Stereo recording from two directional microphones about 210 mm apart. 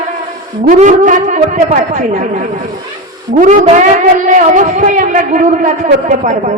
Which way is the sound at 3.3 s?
35° right (ahead or behind).